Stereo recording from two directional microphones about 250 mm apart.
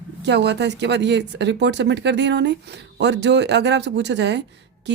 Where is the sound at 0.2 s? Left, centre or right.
Right.